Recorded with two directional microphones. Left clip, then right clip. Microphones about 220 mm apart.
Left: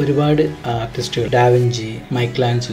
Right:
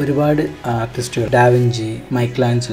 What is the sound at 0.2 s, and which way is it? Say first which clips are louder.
Speech: even; 15° right (ahead or behind).